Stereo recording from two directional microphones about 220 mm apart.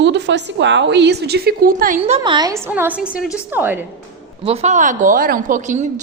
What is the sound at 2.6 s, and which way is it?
A woman's voice, 5° right (ahead or behind).